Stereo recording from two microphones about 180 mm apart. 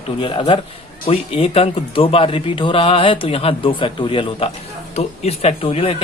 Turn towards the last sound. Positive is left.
turn(degrees=30)  # may be behind; listen again after turning